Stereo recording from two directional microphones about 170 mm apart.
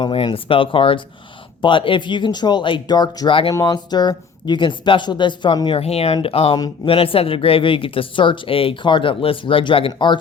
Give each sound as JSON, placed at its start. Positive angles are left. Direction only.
{"t": 0.0, "sound": "speech", "side_deg": 30}